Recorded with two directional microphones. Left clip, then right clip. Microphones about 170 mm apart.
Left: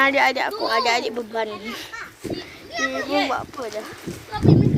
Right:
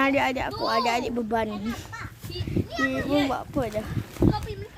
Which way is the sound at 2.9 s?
5° right (ahead or behind).